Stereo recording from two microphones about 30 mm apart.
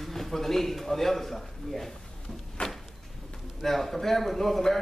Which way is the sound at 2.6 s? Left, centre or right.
Left.